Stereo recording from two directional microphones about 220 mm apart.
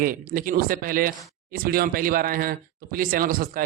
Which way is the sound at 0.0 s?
40° right (ahead or behind).